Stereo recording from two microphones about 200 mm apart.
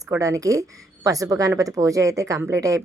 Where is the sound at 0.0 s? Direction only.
15° right (ahead or behind).